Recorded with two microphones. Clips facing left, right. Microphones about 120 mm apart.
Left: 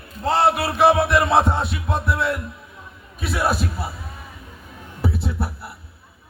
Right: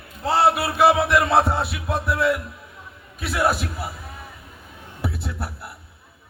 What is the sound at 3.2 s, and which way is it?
Speech, centre (ahead or behind).